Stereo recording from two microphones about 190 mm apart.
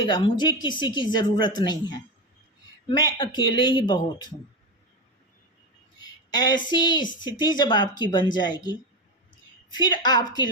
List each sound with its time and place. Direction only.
0.0 s speech: 25° left (ahead or behind)
6.0 s speech: 20° left (ahead or behind)